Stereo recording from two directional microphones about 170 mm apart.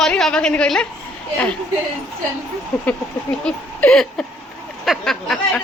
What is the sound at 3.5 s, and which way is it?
A woman's voice, 5° left (ahead or behind).